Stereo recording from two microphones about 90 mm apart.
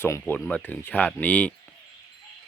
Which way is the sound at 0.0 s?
25° left (ahead or behind).